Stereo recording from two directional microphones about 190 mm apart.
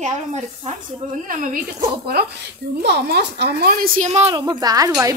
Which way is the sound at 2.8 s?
60° right (ahead or behind).